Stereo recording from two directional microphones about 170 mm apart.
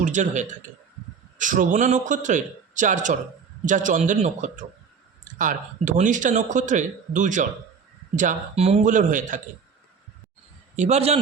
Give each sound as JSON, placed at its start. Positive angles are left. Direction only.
{"t": 0.0, "sound": "a man's voice", "side_deg": -45}
{"t": 10.8, "sound": "a man's voice", "side_deg": -40}